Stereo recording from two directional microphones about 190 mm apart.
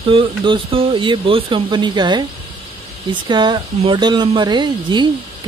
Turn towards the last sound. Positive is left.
turn(degrees=-25)  # may be behind; listen again after turning